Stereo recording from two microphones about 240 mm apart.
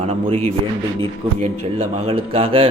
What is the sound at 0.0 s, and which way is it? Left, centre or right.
Speech, right.